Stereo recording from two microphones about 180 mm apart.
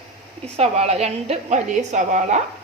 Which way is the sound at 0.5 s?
35° right (ahead or behind).